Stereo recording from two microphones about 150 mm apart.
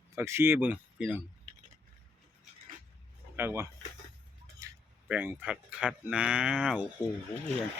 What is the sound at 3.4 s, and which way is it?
Speech, 15° right (ahead or behind).